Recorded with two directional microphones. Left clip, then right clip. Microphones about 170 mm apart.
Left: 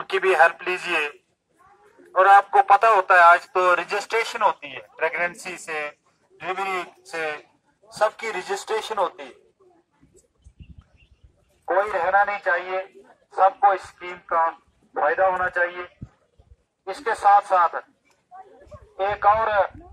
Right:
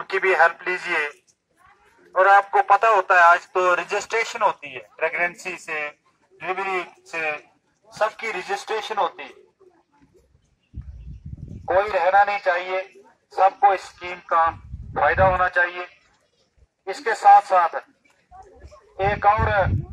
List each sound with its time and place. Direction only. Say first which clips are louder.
0.0 s speech: even; 35° left (ahead or behind)
2.1 s fowl: left 1 dB; 25° left (ahead or behind)
2.6 s speech: left 1 dB; 15° left (ahead or behind); by 6.9 s 10° right (ahead or behind)
7.1 s speech: right 2 dB; 25° right (ahead or behind)
11.6 s speech: right 2 dB; 40° right (ahead or behind)
18.9 s speech: even; 40° right (ahead or behind)